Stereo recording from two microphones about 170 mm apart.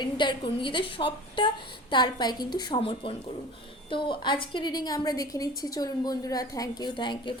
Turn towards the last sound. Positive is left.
turn(degrees=25)  # may be behind; listen again after turning